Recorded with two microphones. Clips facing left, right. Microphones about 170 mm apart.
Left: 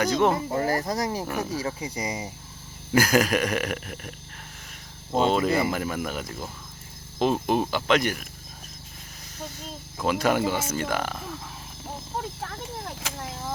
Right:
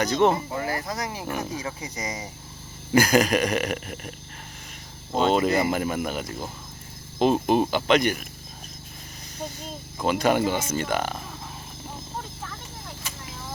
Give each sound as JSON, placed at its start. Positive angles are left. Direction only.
{"t": 0.0, "sound": "speech", "side_deg": 5}
{"t": 0.5, "sound": "speech", "side_deg": 40}
{"t": 1.2, "sound": "speech", "side_deg": -10}
{"t": 1.6, "sound": "speech", "side_deg": 30}
{"t": 2.9, "sound": "speech", "side_deg": 5}
{"t": 5.1, "sound": "speech", "side_deg": 0}
{"t": 10.0, "sound": "speech", "side_deg": 0}